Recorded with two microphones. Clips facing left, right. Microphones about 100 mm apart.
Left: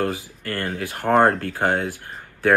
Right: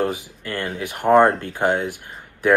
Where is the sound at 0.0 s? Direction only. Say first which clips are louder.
Right 1 dB; 20° right (ahead or behind).